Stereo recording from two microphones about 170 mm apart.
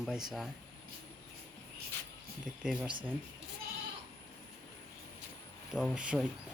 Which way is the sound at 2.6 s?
5° right (ahead or behind).